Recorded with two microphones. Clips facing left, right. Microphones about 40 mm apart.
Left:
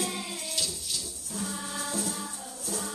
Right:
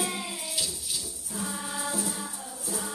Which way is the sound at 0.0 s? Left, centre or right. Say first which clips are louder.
Right 1 dB; centre.